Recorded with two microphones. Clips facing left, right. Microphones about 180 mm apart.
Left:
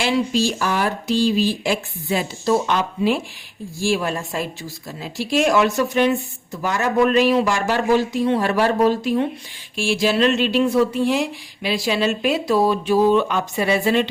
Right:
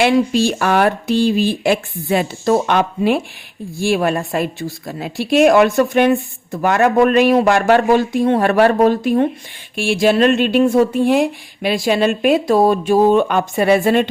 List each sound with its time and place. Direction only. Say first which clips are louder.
0.0 s speech: right 6 dB; 55° right (ahead or behind)